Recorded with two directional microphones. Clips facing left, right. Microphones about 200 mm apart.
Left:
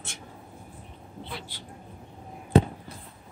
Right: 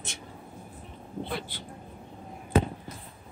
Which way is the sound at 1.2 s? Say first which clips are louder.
Right 6 dB; 55° right (ahead or behind).